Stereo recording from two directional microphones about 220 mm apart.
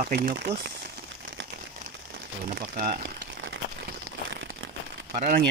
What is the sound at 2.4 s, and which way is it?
Speech, 40° right (ahead or behind).